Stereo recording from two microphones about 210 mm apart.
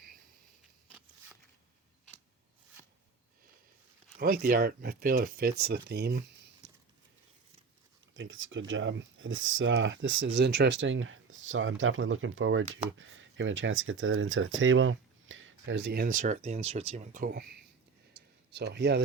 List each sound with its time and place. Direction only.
4.2 s speech: 45° right (ahead or behind)
8.1 s speech: 65° right (ahead or behind); by 17.4 s 45° right (ahead or behind)
18.1 s a sound: 50° right (ahead or behind)